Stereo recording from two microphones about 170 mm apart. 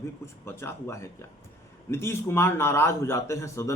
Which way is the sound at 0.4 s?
15° left (ahead or behind).